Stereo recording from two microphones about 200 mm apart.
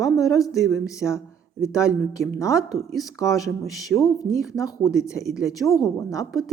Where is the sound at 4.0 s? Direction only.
15° left (ahead or behind).